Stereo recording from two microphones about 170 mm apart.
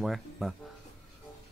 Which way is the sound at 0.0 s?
Centre (ahead or behind).